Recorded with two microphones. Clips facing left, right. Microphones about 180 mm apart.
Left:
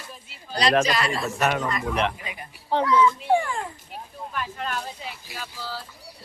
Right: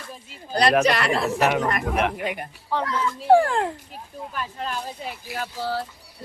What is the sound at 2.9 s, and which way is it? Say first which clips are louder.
Speech: left 7 dB; 50° right (ahead or behind).